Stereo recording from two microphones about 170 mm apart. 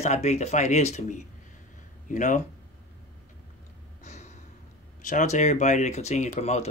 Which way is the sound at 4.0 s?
45° left (ahead or behind).